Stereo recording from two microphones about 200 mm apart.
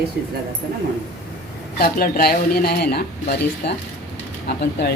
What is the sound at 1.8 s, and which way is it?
Speech, 50° left (ahead or behind).